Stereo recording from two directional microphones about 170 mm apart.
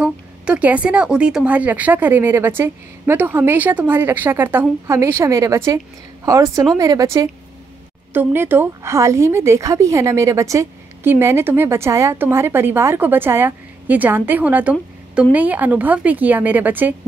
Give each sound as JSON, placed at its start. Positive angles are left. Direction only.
{"t": 0.0, "sound": "a woman's voice", "side_deg": -5}